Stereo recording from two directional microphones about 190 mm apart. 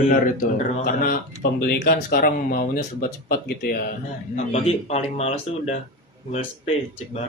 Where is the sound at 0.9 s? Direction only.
50° left (ahead or behind).